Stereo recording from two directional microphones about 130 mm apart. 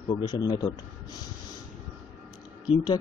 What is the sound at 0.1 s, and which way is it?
Speech, 30° left (ahead or behind).